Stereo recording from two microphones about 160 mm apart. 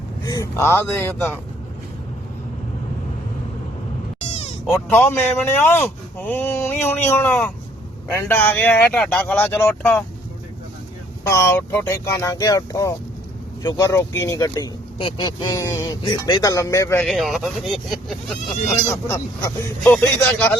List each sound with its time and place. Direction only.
0.3 s speech: 20° left (ahead or behind)
4.3 s a sound: 40° left (ahead or behind)
4.9 s speech: 15° left (ahead or behind)
11.2 s speech: 20° left (ahead or behind)
17.1 s speech: centre (ahead or behind)
18.9 s speech: 15° left (ahead or behind)